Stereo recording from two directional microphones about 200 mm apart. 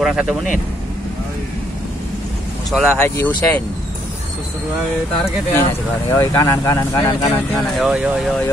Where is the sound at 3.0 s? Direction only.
10° left (ahead or behind).